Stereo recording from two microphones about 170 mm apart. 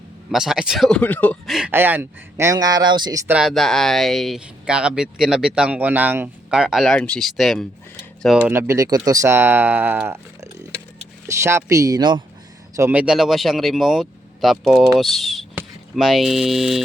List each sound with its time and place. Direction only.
0.3 s speech: centre (ahead or behind)
1.5 s speech: centre (ahead or behind)
1.7 s speech: 15° right (ahead or behind)
3.3 s speech: centre (ahead or behind); by 12.2 s 25° right (ahead or behind)
12.7 s speech: 10° right (ahead or behind)